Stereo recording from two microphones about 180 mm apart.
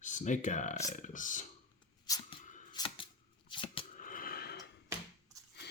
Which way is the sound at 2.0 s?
20° left (ahead or behind).